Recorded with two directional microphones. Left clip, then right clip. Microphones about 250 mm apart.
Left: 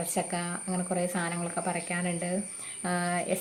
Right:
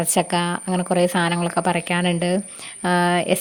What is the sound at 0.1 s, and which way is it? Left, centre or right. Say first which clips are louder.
Speech: right 12 dB; right.